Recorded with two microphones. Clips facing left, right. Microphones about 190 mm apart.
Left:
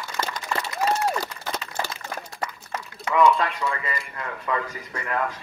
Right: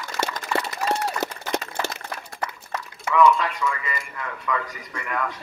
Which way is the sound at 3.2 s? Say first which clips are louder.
Right 1 dB; 35° left (ahead or behind).